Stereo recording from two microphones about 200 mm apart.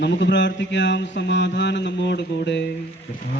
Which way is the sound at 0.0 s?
65° left (ahead or behind).